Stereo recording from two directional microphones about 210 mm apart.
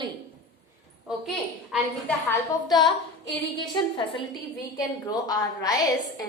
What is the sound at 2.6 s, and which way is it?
A woman's voice, 20° left (ahead or behind).